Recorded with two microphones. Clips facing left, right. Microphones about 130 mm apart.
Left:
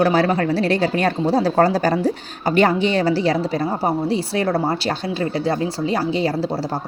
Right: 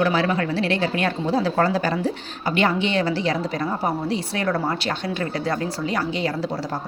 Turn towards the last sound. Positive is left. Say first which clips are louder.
# left 4 dB
turn(degrees=35)  # may be behind; listen again after turning